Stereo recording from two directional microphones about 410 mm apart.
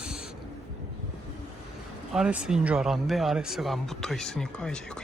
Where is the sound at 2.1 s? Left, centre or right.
Centre.